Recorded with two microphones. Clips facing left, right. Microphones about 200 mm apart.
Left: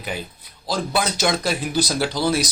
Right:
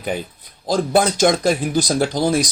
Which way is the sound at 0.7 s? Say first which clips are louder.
Right 6 dB; 50° right (ahead or behind).